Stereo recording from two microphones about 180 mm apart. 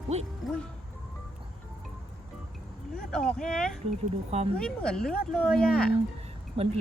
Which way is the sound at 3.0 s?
5° left (ahead or behind).